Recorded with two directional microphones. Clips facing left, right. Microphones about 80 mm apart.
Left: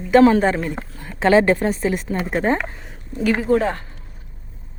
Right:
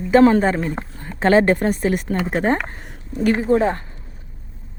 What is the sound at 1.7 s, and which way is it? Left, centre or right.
A woman's voice, right.